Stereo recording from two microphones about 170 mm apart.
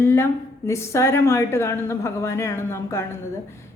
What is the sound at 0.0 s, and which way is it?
A woman's voice, 15° left (ahead or behind).